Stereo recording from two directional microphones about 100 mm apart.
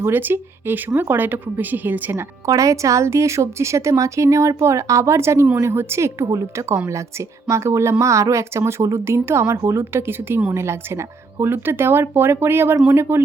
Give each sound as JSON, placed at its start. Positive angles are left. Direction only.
{"t": 0.0, "sound": "a woman's voice", "side_deg": -20}
{"t": 2.5, "sound": "a woman's voice", "side_deg": -35}